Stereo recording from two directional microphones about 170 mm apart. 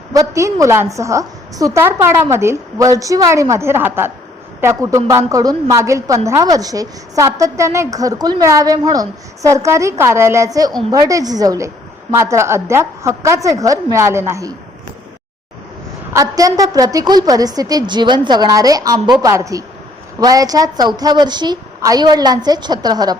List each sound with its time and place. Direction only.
0.1 s a woman's voice: 20° right (ahead or behind)
16.1 s a woman's voice: 20° right (ahead or behind)